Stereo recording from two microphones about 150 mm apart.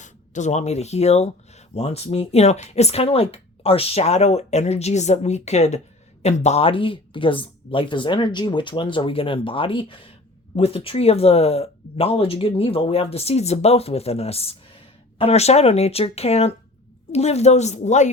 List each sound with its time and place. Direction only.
0.0 s speech: 55° left (ahead or behind)